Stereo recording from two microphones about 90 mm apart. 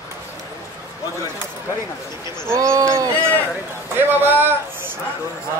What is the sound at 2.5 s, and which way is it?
A man's voice, 35° right (ahead or behind).